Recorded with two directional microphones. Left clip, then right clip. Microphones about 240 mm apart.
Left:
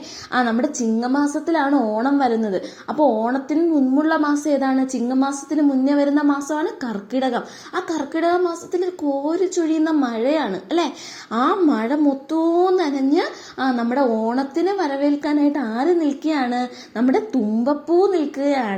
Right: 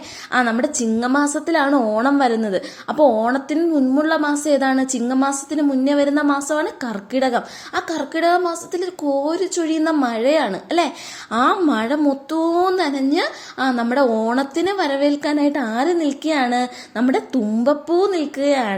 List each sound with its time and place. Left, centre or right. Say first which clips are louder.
0.3 s a woman's voice: right 2 dB; centre
4.3 s a woman's voice: right 2 dB; right